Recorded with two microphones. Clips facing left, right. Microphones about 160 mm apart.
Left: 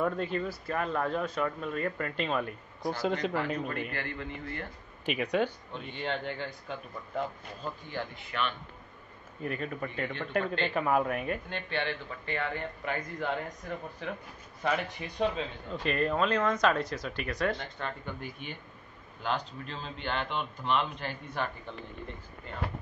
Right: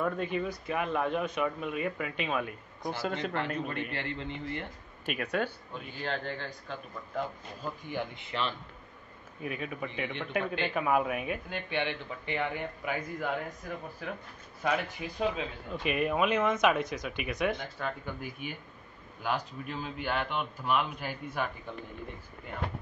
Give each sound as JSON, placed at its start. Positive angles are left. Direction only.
{"t": 0.2, "sound": "speech", "side_deg": -10}
{"t": 2.9, "sound": "speech", "side_deg": 15}
{"t": 3.3, "sound": "speech", "side_deg": 0}
{"t": 3.9, "sound": "a man's voice", "side_deg": -25}
{"t": 5.0, "sound": "speech", "side_deg": -5}
{"t": 7.9, "sound": "a man's voice", "side_deg": -20}
{"t": 9.4, "sound": "speech", "side_deg": -5}
{"t": 17.6, "sound": "speech", "side_deg": -5}